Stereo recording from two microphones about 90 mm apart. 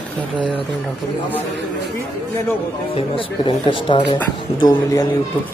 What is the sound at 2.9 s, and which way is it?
Speech, 85° left.